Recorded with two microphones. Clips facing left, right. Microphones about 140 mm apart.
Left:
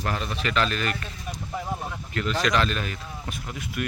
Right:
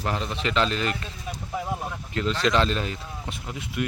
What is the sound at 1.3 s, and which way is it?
Speech, 5° right (ahead or behind).